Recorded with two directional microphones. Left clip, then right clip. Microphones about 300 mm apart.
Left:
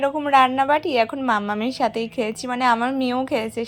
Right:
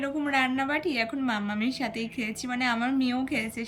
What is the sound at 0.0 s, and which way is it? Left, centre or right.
A woman's voice, centre.